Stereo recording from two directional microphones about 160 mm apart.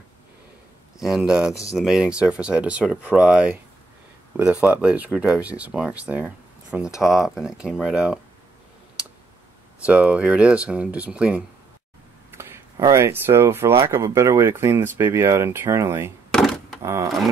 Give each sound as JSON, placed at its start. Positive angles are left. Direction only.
{"t": 0.9, "sound": "speech", "side_deg": -5}
{"t": 9.8, "sound": "speech", "side_deg": -5}
{"t": 16.3, "sound": "door", "side_deg": 0}
{"t": 16.8, "sound": "speech", "side_deg": -15}